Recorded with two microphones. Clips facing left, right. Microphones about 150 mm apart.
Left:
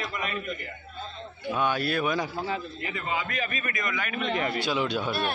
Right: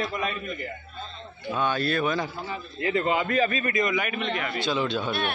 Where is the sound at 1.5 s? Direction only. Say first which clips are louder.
Right 1 dB; 10° left (ahead or behind).